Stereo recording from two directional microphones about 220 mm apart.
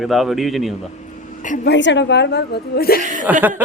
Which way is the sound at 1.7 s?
55° left (ahead or behind).